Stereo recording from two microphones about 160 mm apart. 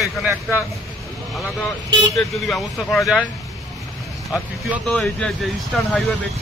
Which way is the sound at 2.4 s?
Centre (ahead or behind).